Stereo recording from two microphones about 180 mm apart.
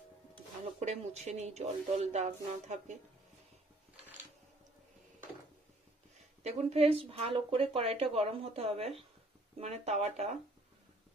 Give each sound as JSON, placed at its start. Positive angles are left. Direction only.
{"t": 0.3, "sound": "speech", "side_deg": -35}
{"t": 6.4, "sound": "speech", "side_deg": -35}